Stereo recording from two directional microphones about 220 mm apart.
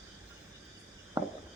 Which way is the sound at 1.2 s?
15° right (ahead or behind).